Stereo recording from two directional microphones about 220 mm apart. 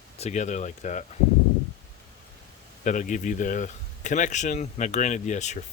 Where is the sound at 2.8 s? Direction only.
35° left (ahead or behind).